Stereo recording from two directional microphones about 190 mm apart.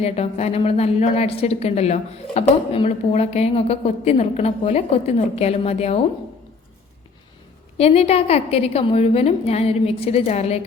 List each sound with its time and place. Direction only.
0.0 s a woman's voice: 35° left (ahead or behind)
7.8 s a woman's voice: 35° left (ahead or behind)